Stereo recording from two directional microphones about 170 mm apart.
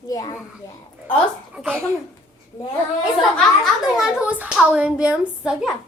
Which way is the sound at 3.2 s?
Centre (ahead or behind).